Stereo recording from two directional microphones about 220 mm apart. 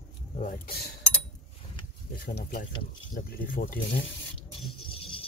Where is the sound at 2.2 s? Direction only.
40° left (ahead or behind).